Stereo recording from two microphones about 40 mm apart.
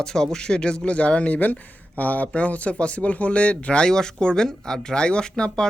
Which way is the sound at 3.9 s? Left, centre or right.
Centre.